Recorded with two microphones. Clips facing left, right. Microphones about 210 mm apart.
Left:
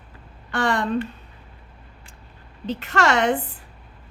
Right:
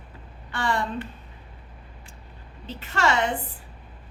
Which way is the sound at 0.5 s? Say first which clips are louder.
Left 4 dB; 70° left (ahead or behind).